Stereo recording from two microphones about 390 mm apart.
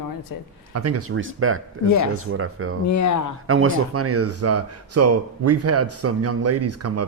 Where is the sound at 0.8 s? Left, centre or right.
Right.